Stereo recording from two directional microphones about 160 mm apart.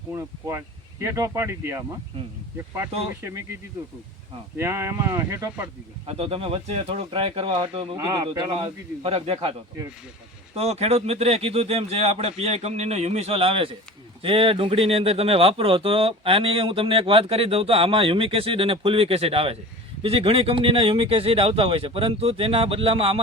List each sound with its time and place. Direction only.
0.1 s speech: 20° right (ahead or behind)
4.5 s speech: 15° right (ahead or behind)
6.1 s speech: 40° right (ahead or behind)
7.9 s speech: 20° right (ahead or behind)
8.3 s speech: 35° right (ahead or behind)